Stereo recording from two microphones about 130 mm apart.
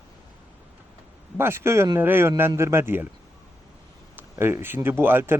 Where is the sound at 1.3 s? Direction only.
20° right (ahead or behind).